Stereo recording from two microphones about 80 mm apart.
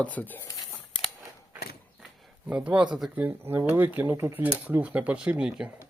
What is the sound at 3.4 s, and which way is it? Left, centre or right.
Speech, right.